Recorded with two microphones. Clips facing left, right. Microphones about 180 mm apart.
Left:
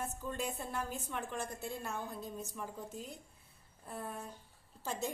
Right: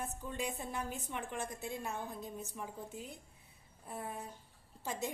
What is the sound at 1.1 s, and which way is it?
Speech, 5° right (ahead or behind).